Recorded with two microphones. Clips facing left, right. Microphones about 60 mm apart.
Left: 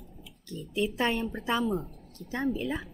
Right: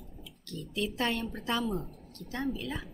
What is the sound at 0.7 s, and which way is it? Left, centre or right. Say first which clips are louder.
A woman's voice: left 4 dB; centre.